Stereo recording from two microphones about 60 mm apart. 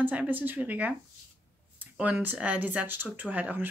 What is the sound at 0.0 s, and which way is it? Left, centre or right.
Speech, right.